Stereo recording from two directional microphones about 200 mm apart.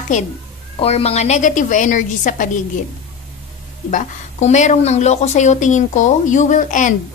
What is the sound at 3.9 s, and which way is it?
A woman's voice, 40° left (ahead or behind).